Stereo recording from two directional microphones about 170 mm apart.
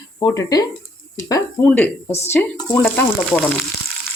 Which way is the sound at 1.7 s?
10° left (ahead or behind).